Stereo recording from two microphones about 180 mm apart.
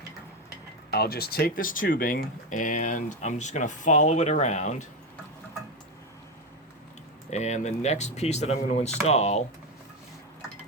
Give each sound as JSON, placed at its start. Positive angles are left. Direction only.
{"t": 0.9, "sound": "speech", "side_deg": 60}
{"t": 7.3, "sound": "speech", "side_deg": 40}